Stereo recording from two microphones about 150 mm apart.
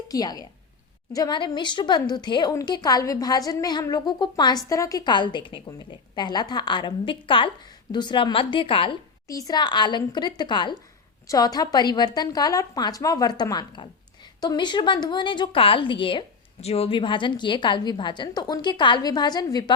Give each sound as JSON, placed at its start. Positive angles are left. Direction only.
{"t": 0.1, "sound": "a woman's voice", "side_deg": 25}
{"t": 9.2, "sound": "a woman's voice", "side_deg": 20}